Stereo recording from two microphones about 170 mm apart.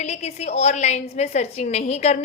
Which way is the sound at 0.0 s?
40° left (ahead or behind).